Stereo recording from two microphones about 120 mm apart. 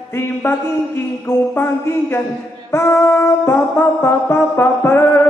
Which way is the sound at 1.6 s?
20° left (ahead or behind).